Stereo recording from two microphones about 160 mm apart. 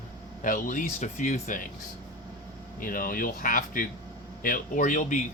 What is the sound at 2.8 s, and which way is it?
Speech, 60° left (ahead or behind).